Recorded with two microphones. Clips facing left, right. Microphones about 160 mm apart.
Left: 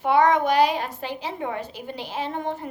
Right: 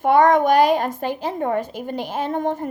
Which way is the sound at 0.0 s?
50° right (ahead or behind).